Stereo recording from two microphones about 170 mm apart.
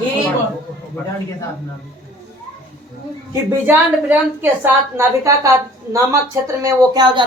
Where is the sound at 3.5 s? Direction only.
10° right (ahead or behind).